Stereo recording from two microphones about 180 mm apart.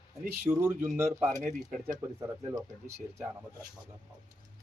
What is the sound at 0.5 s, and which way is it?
Speech, 10° right (ahead or behind).